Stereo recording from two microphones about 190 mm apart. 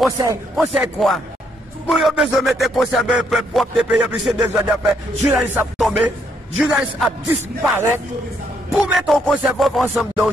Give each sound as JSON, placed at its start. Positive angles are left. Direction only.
{"t": 0.6, "sound": "speech", "side_deg": 0}
{"t": 5.3, "sound": "music", "side_deg": -10}
{"t": 5.9, "sound": "speech", "side_deg": -5}
{"t": 7.6, "sound": "music", "side_deg": -10}
{"t": 8.7, "sound": "speech", "side_deg": 0}